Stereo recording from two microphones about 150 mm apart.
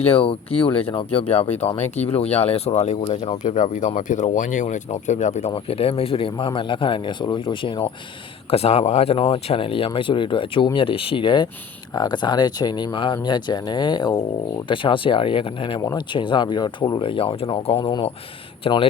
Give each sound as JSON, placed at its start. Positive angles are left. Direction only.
{"t": 0.0, "sound": "speech", "side_deg": 40}
{"t": 3.4, "sound": "speech", "side_deg": 55}
{"t": 8.4, "sound": "speech", "side_deg": 45}